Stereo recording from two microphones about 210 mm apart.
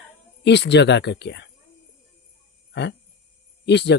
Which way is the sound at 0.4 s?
55° left (ahead or behind).